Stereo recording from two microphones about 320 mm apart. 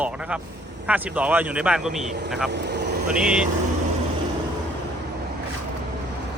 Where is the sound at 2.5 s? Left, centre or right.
Right.